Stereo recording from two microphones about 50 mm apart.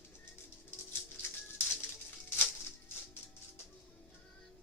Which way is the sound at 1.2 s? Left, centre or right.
Left.